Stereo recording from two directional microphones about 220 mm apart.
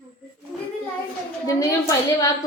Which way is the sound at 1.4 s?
15° left (ahead or behind).